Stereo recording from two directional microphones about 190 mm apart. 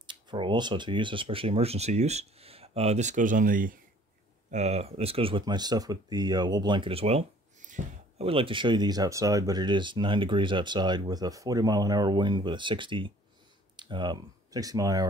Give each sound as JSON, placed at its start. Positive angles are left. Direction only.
{"t": 0.0, "sound": "speech", "side_deg": -25}
{"t": 4.5, "sound": "speech", "side_deg": -35}